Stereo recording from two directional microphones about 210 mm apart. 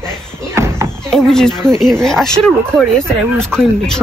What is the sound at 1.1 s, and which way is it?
Speech, 5° left (ahead or behind).